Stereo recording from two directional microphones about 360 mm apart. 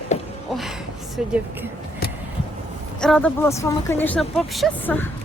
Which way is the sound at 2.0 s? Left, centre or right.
Left.